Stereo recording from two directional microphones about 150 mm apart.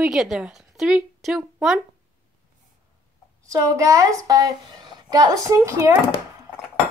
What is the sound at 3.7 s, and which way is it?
A woman's voice, 20° right (ahead or behind).